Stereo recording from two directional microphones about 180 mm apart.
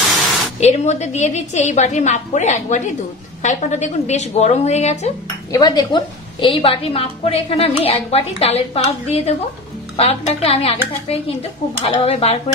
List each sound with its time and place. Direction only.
0.6 s a woman's voice: 40° left (ahead or behind)
5.5 s a woman's voice: 20° left (ahead or behind)
11.8 s a woman's voice: 35° left (ahead or behind)